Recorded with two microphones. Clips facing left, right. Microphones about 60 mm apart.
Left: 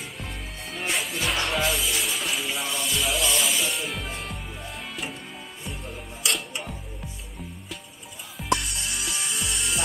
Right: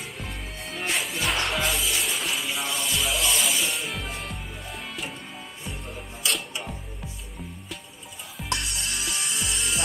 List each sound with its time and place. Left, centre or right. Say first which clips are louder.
0.2 s music: even; centre
8.4 s music: left 4 dB; centre